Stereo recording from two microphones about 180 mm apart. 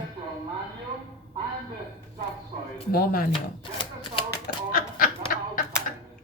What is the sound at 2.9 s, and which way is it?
Speech, 55° left (ahead or behind).